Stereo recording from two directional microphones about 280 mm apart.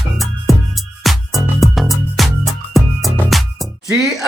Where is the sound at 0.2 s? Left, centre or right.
Centre.